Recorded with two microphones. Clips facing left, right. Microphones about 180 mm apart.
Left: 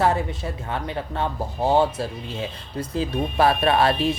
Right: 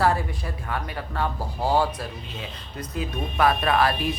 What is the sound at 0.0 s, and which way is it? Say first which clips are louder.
Speech: left 2 dB; 20° left (ahead or behind).